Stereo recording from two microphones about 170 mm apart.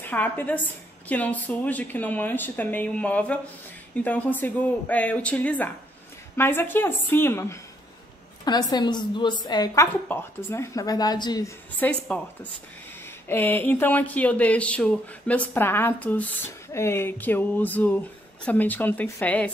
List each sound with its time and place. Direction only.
0.0 s a woman's voice: 10° left (ahead or behind)
11.8 s speech: 10° left (ahead or behind)